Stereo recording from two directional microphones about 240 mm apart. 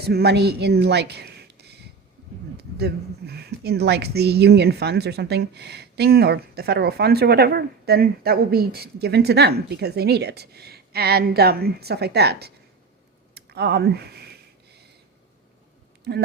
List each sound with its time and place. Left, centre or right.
0.0 s speech: right
13.3 s a sound: right
16.1 s speech: right